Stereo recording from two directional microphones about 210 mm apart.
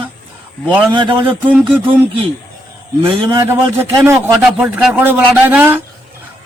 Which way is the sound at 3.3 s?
15° right (ahead or behind).